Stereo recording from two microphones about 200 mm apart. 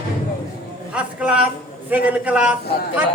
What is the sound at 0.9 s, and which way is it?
A man's voice, 5° right (ahead or behind).